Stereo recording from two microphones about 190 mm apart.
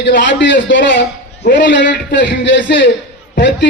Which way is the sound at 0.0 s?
65° left (ahead or behind).